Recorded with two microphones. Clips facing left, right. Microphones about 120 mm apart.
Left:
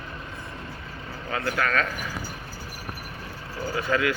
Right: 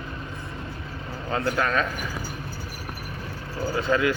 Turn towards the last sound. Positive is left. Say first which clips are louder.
# right 2 dB
turn(degrees=-25)  # may be behind; listen again after turning